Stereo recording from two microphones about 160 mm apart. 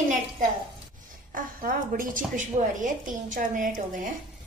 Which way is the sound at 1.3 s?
60° right (ahead or behind).